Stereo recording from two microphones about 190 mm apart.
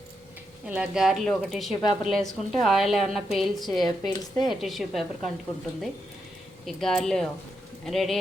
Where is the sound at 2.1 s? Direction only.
Centre (ahead or behind).